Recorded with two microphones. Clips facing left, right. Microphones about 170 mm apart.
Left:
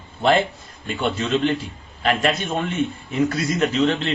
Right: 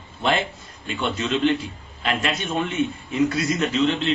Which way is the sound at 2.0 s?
40° left (ahead or behind).